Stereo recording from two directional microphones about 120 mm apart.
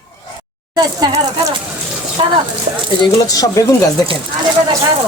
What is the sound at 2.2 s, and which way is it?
Speech, 45° right (ahead or behind).